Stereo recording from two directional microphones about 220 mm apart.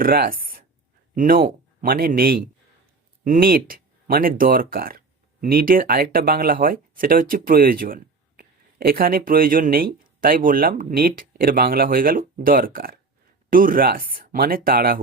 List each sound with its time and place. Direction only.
0.0 s speech: 40° right (ahead or behind)